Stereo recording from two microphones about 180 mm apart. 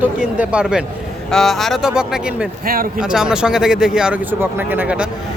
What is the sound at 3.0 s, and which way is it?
Speech, 5° right (ahead or behind).